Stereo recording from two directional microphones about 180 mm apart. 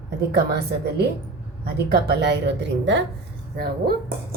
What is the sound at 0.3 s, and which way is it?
Speech, 65° right (ahead or behind).